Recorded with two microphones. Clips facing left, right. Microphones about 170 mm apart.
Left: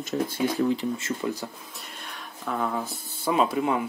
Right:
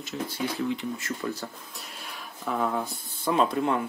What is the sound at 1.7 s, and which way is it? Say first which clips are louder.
Speech: even; centre (ahead or behind).